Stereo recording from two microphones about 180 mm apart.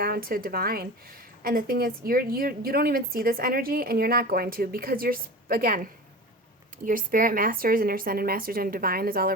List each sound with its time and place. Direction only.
0.0 s a woman's voice: 55° right (ahead or behind)